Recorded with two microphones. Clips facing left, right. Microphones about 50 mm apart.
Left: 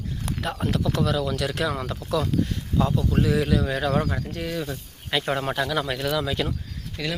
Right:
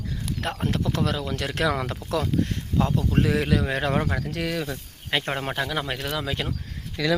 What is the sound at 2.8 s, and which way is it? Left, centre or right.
Speech, right.